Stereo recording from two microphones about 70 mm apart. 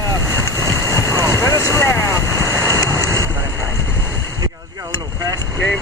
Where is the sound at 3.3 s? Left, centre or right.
Right.